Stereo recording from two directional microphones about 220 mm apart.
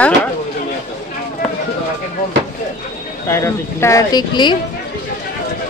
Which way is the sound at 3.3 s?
10° left (ahead or behind).